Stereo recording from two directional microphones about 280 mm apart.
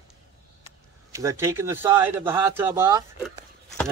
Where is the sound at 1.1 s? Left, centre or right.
Centre.